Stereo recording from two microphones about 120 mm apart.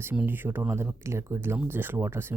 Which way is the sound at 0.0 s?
15° right (ahead or behind).